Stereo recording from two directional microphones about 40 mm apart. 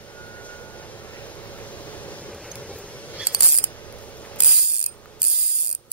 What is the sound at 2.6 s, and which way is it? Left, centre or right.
Vehicle, left.